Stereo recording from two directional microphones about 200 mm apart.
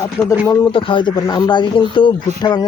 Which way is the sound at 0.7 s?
25° left (ahead or behind).